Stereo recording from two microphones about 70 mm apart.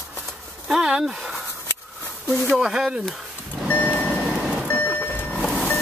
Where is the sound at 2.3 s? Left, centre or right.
Centre.